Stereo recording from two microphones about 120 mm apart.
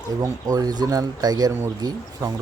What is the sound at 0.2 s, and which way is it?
Speech, 30° right (ahead or behind).